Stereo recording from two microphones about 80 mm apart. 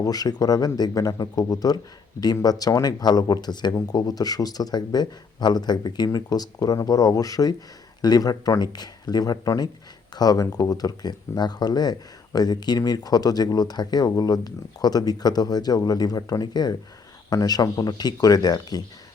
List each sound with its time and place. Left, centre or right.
0.0 s speech: left